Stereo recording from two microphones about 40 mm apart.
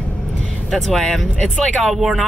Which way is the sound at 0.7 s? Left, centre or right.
Centre.